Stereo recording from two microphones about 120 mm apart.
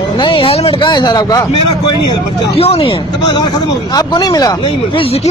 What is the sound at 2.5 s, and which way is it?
Speech, 55° left (ahead or behind).